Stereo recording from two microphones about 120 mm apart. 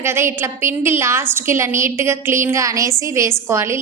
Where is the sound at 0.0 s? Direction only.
20° right (ahead or behind).